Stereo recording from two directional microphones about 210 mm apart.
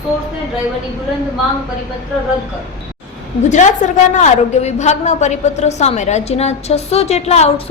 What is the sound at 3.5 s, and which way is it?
A woman's voice, 35° left (ahead or behind).